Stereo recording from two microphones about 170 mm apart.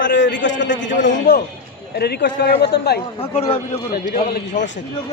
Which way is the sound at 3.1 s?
35° left (ahead or behind).